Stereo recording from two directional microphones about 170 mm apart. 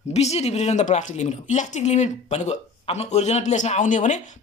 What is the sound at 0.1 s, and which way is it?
Speech, 40° left (ahead or behind).